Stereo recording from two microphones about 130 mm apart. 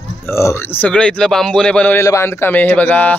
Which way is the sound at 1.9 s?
20° left (ahead or behind).